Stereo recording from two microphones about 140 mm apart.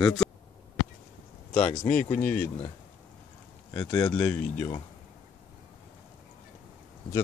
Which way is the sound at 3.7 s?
10° left (ahead or behind).